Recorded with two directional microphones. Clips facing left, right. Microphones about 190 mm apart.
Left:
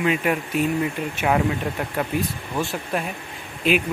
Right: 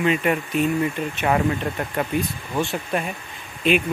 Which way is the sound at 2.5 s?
Centre (ahead or behind).